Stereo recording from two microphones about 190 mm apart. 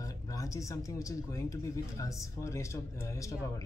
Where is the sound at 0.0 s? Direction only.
15° left (ahead or behind).